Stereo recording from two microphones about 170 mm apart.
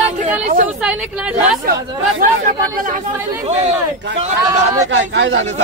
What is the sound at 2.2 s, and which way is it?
Speech, 50° right (ahead or behind).